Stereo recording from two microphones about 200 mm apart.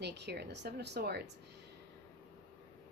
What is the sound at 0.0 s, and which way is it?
A woman's voice, 55° right (ahead or behind).